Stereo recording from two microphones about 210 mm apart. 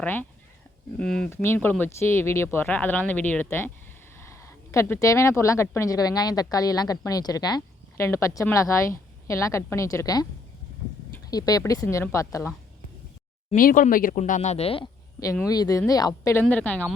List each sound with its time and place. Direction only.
0.0 s a woman's voice: 10° left (ahead or behind)
13.6 s speech: 40° left (ahead or behind)
15.2 s a woman's voice: 15° left (ahead or behind)